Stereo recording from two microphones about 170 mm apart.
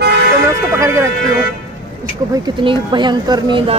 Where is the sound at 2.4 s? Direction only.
25° right (ahead or behind).